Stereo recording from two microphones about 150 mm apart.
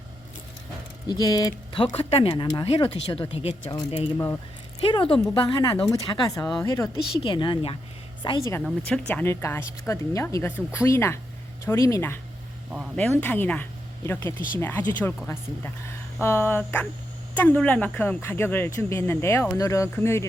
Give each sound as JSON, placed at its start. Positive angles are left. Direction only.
{"t": 1.0, "sound": "speech", "side_deg": 25}
{"t": 3.7, "sound": "speech", "side_deg": 25}
{"t": 4.8, "sound": "speech", "side_deg": 35}
{"t": 6.4, "sound": "speech", "side_deg": 5}
{"t": 6.7, "sound": "speech", "side_deg": 20}
{"t": 7.2, "sound": "speech", "side_deg": 30}
{"t": 8.6, "sound": "speech", "side_deg": 10}
{"t": 13.0, "sound": "speech", "side_deg": 5}